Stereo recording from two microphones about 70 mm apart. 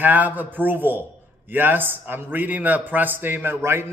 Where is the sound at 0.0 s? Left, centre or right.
Right.